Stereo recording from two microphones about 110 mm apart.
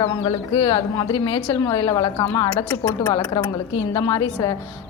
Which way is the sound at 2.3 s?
25° left (ahead or behind).